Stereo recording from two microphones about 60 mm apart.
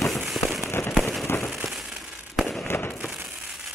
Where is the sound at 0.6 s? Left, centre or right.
Left.